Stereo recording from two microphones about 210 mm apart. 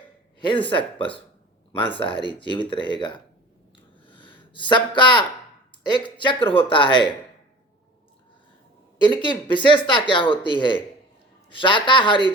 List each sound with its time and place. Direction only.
0.3 s a man's voice: 20° left (ahead or behind)
4.0 s a sound: 25° left (ahead or behind)
4.5 s speech: 20° left (ahead or behind)
9.0 s speech: 20° left (ahead or behind)